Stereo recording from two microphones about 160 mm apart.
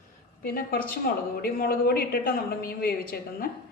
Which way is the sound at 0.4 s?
65° left (ahead or behind).